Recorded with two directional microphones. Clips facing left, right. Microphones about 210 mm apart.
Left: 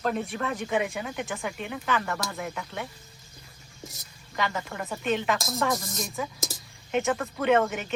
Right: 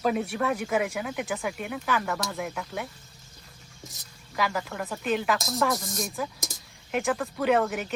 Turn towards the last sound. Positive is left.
turn(degrees=0)  # may be behind; listen again after turning